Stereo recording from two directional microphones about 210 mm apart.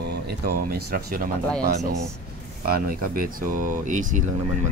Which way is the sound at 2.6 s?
45° right (ahead or behind).